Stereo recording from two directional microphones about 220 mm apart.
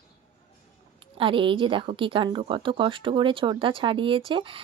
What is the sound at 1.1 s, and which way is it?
Speech, 25° right (ahead or behind).